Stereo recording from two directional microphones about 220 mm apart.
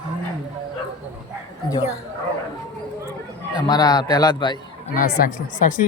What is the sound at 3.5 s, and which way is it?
A man's voice, 20° left (ahead or behind).